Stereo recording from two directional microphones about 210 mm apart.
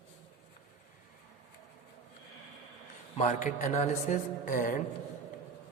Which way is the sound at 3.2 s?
35° left (ahead or behind).